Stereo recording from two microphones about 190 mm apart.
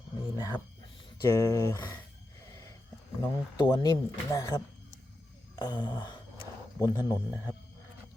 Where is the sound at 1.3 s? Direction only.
15° left (ahead or behind).